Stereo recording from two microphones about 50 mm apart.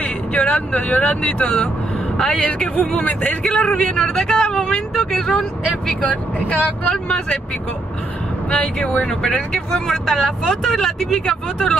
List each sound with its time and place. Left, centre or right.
0.0 s a man's voice: left
4.0 s speech: centre
8.5 s speech: centre
8.8 s speech: left
9.7 s speech: centre